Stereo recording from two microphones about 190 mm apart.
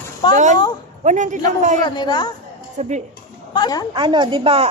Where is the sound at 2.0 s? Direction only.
20° left (ahead or behind).